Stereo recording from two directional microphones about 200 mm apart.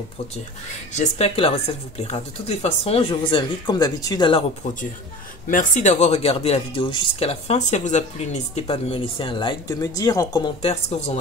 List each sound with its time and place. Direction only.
0.9 s speech: 30° left (ahead or behind)
5.5 s speech: 40° left (ahead or behind)